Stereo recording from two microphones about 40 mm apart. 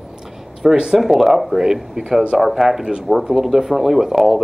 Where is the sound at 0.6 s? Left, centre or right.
Centre.